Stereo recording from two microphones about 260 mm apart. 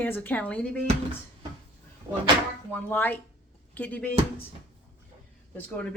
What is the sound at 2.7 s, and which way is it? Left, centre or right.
Speech, centre.